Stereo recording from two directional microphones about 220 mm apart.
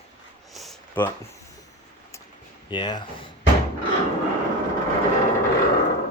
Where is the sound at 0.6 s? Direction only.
5° left (ahead or behind).